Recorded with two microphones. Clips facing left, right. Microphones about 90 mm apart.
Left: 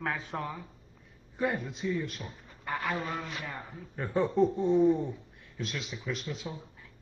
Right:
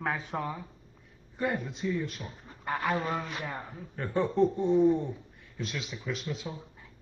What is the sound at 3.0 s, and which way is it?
Speech, 35° right (ahead or behind).